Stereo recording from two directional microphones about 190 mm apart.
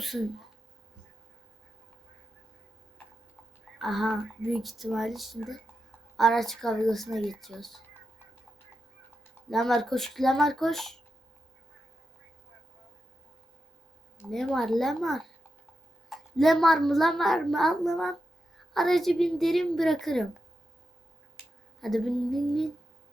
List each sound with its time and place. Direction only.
0.0 s speech: centre (ahead or behind)
3.8 s speech: centre (ahead or behind)
9.5 s speech: centre (ahead or behind)
14.3 s a child's voice: centre (ahead or behind)
21.3 s finger snapping: centre (ahead or behind)